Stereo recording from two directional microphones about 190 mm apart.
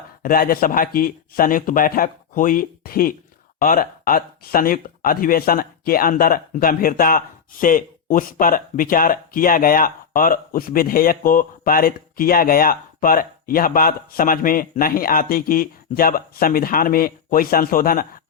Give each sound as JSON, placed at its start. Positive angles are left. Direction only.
{"t": 0.2, "sound": "speech", "side_deg": 50}